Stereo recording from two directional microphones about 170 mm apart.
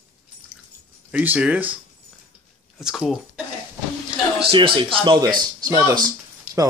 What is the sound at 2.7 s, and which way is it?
Speech, centre (ahead or behind).